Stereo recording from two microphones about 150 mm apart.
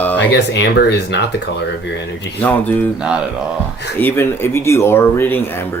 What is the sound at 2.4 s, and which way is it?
Speech, 10° left (ahead or behind).